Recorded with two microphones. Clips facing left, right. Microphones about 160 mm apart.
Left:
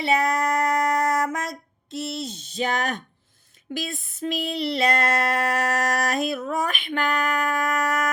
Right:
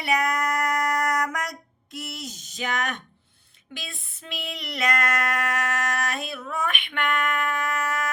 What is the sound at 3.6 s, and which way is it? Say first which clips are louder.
Female singing: left 10 dB; 45° left (ahead or behind).